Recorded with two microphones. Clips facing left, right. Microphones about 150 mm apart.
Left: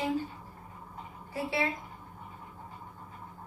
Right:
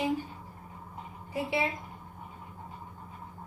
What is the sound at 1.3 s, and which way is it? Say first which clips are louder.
Speech: right 2 dB; 15° right (ahead or behind).